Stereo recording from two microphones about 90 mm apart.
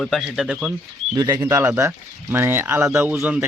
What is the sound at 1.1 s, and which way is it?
Speech, 40° right (ahead or behind).